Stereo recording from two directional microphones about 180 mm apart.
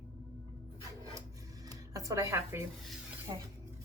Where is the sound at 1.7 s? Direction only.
20° right (ahead or behind).